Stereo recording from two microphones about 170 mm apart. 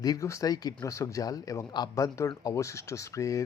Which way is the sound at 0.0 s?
20° left (ahead or behind).